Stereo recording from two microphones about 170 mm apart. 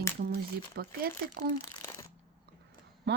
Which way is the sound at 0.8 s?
65° right (ahead or behind).